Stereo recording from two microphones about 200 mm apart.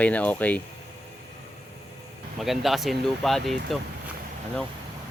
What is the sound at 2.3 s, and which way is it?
Speech, centre (ahead or behind).